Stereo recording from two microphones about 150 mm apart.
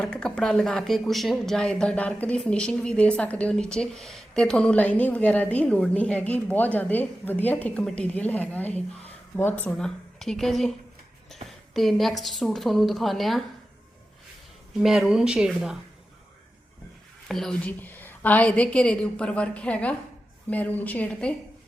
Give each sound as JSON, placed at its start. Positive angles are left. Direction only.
{"t": 0.0, "sound": "speech", "side_deg": 5}
{"t": 14.8, "sound": "speech", "side_deg": 0}
{"t": 17.2, "sound": "speech", "side_deg": 0}